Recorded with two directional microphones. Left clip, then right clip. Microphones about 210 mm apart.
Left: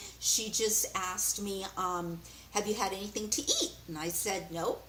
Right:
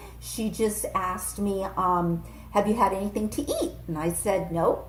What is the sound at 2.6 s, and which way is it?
Speech, 5° left (ahead or behind).